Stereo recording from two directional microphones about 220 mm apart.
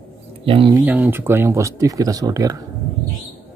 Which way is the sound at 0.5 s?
20° right (ahead or behind).